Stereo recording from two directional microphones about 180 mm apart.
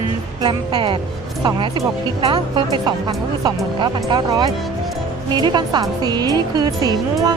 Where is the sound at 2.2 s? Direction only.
30° right (ahead or behind).